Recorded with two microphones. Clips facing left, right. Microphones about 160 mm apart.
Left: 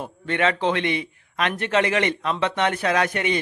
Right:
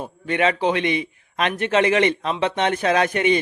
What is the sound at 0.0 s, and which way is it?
Speech, 15° right (ahead or behind).